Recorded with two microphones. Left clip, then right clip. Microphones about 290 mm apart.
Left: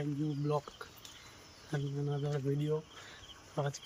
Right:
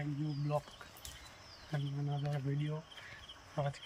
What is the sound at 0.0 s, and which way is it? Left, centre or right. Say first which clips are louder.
Speech: left 5 dB; centre.